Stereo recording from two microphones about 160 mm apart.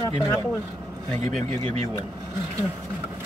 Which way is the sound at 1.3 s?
45° right (ahead or behind).